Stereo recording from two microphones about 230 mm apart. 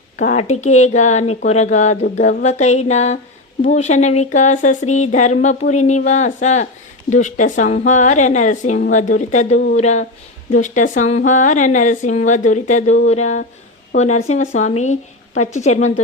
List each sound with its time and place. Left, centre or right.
0.2 s speech: left